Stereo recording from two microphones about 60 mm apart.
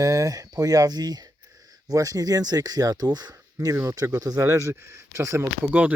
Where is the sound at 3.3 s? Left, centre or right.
Right.